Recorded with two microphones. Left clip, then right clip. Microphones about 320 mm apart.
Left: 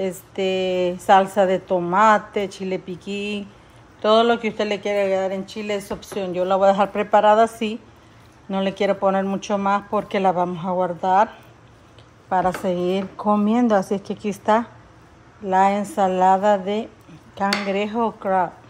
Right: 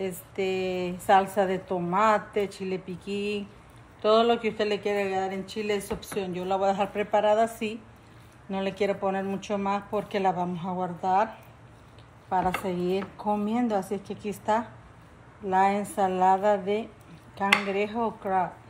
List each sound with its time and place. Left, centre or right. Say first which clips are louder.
0.0 s a woman's voice: left 6 dB; left
12.3 s a woman's voice: left 6 dB; left